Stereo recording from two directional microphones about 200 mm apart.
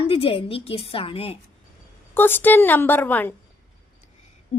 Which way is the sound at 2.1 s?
10° left (ahead or behind).